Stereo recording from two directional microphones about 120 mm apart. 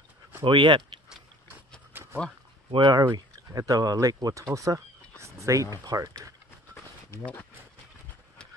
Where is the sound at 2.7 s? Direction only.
35° right (ahead or behind).